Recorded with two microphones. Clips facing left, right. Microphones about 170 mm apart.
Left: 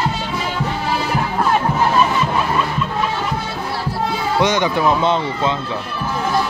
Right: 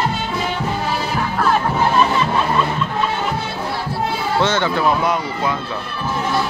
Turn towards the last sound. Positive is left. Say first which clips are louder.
# left 2 dB
turn(degrees=20)  # may be behind; listen again after turning